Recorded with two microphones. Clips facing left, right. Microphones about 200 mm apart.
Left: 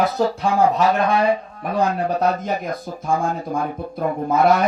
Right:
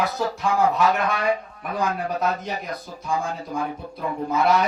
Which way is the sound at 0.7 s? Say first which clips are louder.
Left 4 dB; 30° left (ahead or behind).